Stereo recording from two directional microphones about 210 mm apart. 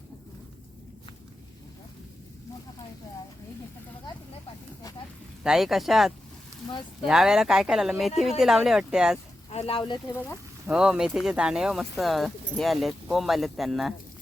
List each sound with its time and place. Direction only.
5.4 s speech: centre (ahead or behind)
9.5 s speech: 30° left (ahead or behind)
10.1 s speech: 10° left (ahead or behind)
10.7 s speech: 5° right (ahead or behind)